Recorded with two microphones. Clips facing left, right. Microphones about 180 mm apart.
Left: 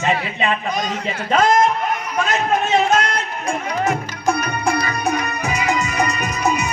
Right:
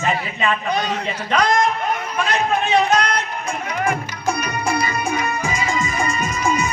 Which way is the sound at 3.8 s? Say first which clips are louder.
Left 1 dB; 55° left (ahead or behind).